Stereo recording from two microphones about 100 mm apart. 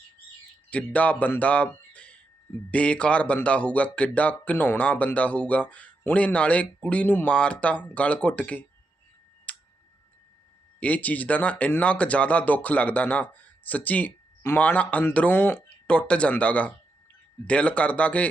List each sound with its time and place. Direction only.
0.7 s a man's voice: 15° left (ahead or behind)
9.5 s tick-tock: 15° left (ahead or behind)
10.8 s a man's voice: 15° left (ahead or behind)